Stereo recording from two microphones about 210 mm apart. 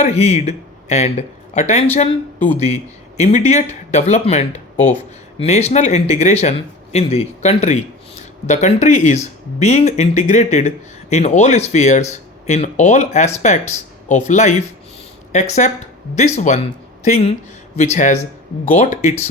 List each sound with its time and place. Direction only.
0.0 s speech: 30° left (ahead or behind)